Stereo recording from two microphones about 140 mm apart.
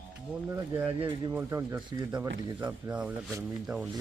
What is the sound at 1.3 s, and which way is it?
Speech, 20° right (ahead or behind).